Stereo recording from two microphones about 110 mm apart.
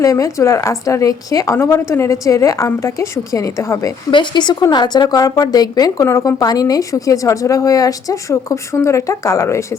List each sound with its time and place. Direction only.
0.0 s a woman's voice: 30° left (ahead or behind)
4.1 s speech: 45° left (ahead or behind); by 9.6 s 30° left (ahead or behind)